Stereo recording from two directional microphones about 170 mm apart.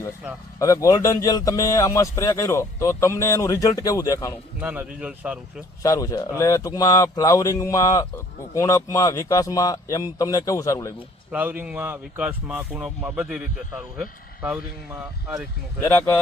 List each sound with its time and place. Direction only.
0.2 s a man's voice: 5° right (ahead or behind)
0.6 s speech: 20° left (ahead or behind)
4.6 s a man's voice: 10° right (ahead or behind)
5.8 s speech: 20° left (ahead or behind)
11.3 s a man's voice: 10° right (ahead or behind)
15.8 s speech: 10° left (ahead or behind)